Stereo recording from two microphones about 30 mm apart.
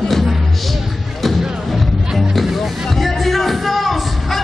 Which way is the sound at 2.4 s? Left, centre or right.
Centre.